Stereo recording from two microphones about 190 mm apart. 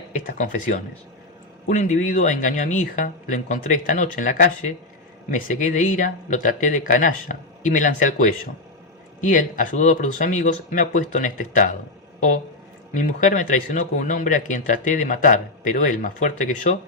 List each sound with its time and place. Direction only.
0.3 s speech: 45° left (ahead or behind)
12.9 s speech: 40° left (ahead or behind)